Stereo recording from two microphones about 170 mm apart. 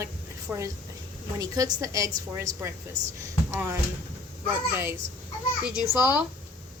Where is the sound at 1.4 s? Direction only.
20° right (ahead or behind).